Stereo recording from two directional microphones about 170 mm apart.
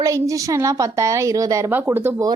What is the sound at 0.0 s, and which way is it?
A woman's voice, 20° right (ahead or behind).